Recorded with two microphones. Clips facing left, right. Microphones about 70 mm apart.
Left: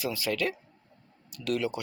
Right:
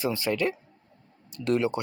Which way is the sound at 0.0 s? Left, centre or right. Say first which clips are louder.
Right 3 dB; right.